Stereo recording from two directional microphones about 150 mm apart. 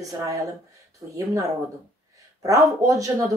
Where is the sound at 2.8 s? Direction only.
20° right (ahead or behind).